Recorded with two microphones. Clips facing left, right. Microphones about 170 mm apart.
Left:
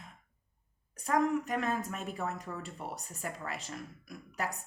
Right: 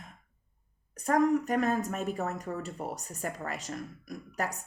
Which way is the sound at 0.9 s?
45° right (ahead or behind).